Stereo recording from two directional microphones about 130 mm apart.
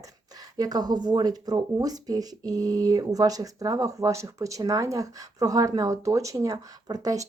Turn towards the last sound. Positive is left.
turn(degrees=-30)  # may be behind; listen again after turning